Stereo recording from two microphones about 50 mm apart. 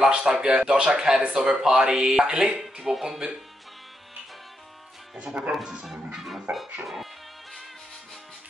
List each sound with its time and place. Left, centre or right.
0.1 s speech: centre
0.7 s music: centre
2.8 s speech: centre
5.1 s speech: right
5.5 s music: centre
6.5 s music: right